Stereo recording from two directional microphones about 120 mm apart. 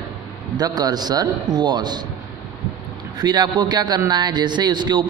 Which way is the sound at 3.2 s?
35° right (ahead or behind).